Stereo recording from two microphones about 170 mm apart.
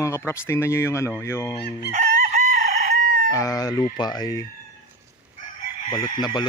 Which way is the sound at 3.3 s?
20° left (ahead or behind).